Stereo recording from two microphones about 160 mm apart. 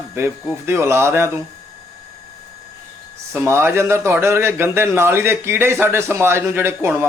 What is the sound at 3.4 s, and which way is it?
A man's voice, 15° right (ahead or behind).